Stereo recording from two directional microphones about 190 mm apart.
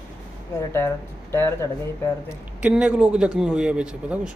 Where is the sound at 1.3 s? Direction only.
10° left (ahead or behind).